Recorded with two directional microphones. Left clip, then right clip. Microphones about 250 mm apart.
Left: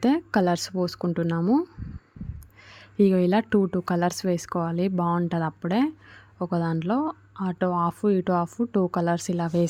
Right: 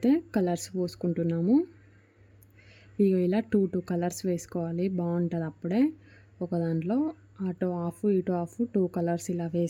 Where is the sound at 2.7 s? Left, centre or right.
Left.